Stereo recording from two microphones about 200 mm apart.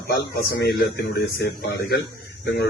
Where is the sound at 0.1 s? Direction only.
55° left (ahead or behind).